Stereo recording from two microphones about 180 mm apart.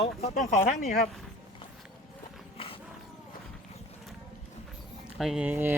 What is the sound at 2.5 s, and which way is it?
Walk, 30° left (ahead or behind).